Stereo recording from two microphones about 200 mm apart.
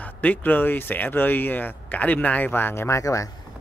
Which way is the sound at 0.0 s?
10° left (ahead or behind).